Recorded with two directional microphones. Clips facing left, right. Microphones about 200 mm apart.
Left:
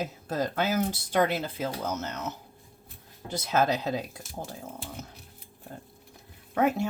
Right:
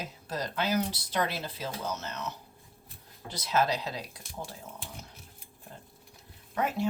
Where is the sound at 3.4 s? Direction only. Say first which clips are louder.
Left 2 dB; 50° left (ahead or behind).